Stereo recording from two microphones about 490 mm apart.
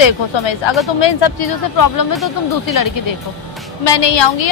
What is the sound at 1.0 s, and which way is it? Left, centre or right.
Speech, left.